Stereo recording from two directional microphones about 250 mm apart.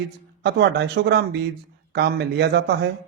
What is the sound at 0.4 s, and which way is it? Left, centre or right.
A man's voice, right.